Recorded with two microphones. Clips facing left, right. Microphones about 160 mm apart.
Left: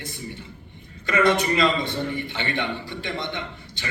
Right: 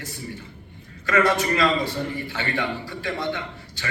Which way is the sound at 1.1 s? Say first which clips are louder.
Even; 20° left (ahead or behind).